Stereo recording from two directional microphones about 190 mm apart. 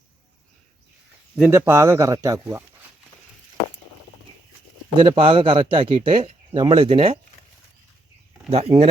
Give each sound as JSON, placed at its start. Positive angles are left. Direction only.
{"t": 1.4, "sound": "speech", "side_deg": -10}
{"t": 4.9, "sound": "speech", "side_deg": -25}
{"t": 8.4, "sound": "speech", "side_deg": -30}